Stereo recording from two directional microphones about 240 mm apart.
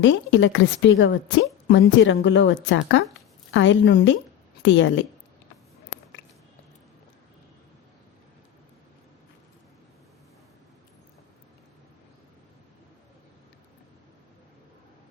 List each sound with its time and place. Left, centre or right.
0.0 s a woman's voice: left